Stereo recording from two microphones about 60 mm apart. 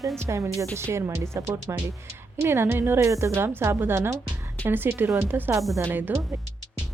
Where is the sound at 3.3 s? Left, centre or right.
Right.